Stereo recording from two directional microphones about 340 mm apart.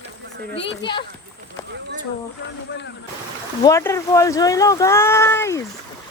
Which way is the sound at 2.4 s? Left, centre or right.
Left.